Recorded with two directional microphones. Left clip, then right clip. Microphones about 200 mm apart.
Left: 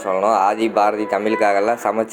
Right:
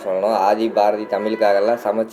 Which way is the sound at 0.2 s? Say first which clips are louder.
Even; 20° left (ahead or behind).